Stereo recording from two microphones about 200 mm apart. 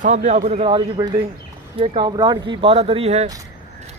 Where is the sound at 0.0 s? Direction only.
35° right (ahead or behind).